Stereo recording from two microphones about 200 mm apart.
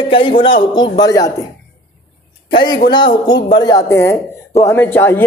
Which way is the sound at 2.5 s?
25° left (ahead or behind).